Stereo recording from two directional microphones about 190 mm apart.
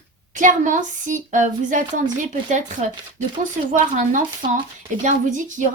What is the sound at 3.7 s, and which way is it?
A woman's voice, 40° right (ahead or behind).